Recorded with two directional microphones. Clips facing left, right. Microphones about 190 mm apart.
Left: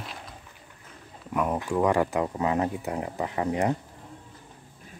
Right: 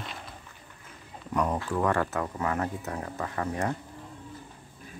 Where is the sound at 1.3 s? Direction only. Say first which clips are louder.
Left 2 dB; 10° left (ahead or behind).